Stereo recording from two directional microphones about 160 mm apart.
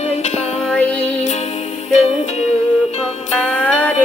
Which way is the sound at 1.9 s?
45° left (ahead or behind).